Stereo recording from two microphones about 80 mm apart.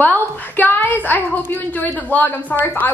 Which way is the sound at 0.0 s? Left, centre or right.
Left.